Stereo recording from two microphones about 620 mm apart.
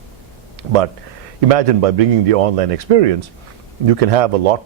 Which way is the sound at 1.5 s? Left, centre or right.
Right.